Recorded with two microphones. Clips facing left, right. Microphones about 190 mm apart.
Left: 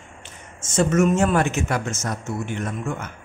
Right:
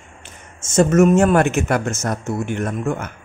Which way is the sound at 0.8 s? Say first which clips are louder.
Right 5 dB; 45° right (ahead or behind).